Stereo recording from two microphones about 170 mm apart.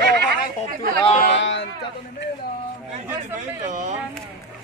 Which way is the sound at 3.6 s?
45° right (ahead or behind).